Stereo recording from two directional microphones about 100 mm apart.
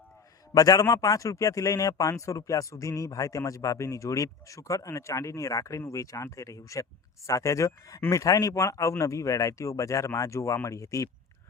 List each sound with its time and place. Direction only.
0.5 s a man's voice: 40° left (ahead or behind)